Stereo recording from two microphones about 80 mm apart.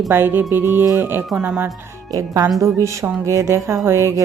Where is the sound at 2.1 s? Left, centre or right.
Right.